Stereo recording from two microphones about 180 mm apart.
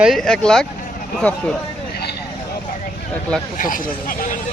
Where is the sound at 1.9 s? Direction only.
60° left (ahead or behind).